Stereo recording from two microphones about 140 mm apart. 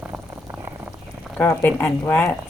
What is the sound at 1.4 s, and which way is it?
Speech, 15° left (ahead or behind).